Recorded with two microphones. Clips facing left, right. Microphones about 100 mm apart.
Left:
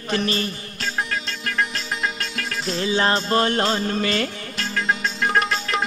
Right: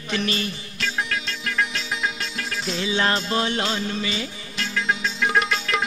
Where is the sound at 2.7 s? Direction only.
40° left (ahead or behind); by 4.3 s 55° left (ahead or behind).